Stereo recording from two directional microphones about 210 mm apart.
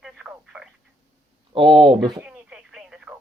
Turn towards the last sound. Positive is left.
turn(degrees=-5)  # may be behind; listen again after turning